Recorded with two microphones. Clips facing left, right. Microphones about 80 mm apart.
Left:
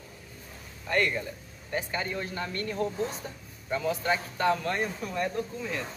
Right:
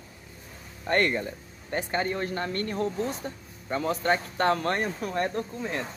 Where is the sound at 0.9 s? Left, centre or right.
Right.